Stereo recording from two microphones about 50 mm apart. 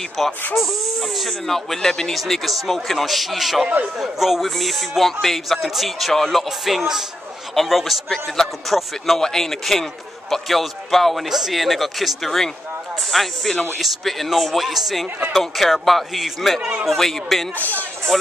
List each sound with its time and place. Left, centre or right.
0.2 s speech: centre
17.6 s speech: left